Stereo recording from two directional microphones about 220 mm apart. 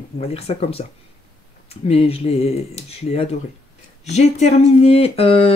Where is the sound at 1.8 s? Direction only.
25° left (ahead or behind).